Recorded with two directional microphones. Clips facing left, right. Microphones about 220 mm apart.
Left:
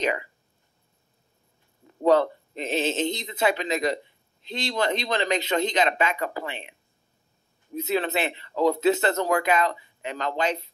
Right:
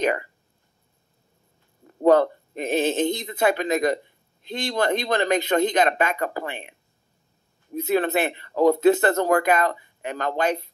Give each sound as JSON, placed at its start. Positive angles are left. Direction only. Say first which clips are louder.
{"t": 0.0, "sound": "speech", "louder": "right 3 dB", "side_deg": -50}
{"t": 1.9, "sound": "speech", "louder": "right 3 dB", "side_deg": -50}
{"t": 7.7, "sound": "speech", "louder": "right 4 dB", "side_deg": -50}